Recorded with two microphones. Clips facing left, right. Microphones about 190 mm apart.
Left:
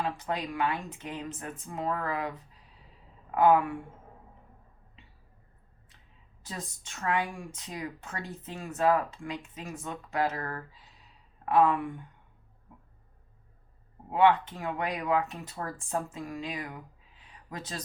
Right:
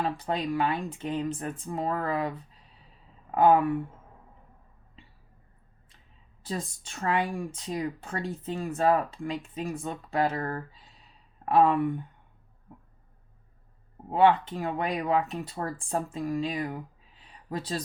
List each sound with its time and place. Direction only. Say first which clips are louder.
0.2 s speech: right 3 dB; 30° right (ahead or behind)
6.4 s speech: right 7 dB; 30° right (ahead or behind)
14.1 s speech: right 2 dB; 30° right (ahead or behind)